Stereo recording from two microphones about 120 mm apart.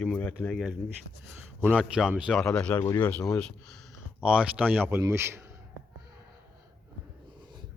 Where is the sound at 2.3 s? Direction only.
5° left (ahead or behind).